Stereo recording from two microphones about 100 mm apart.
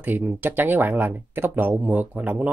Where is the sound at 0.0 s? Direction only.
20° right (ahead or behind).